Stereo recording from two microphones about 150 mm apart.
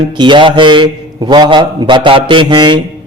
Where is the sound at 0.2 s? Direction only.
30° right (ahead or behind).